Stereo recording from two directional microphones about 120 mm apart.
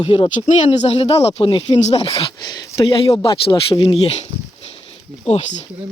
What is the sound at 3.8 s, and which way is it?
Speech, 50° left (ahead or behind).